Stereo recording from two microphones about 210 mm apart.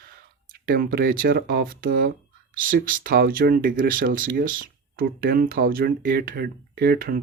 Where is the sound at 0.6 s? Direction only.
45° right (ahead or behind).